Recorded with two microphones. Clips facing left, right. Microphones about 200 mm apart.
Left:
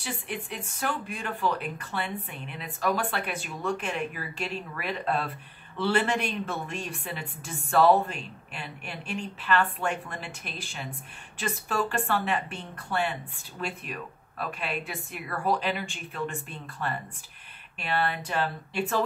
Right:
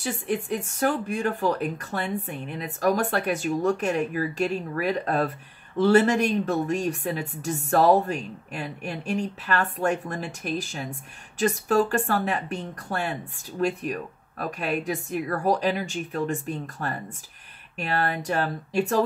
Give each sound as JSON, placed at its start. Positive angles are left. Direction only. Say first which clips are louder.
{"t": 0.0, "sound": "speech", "louder": "right 8 dB", "side_deg": -45}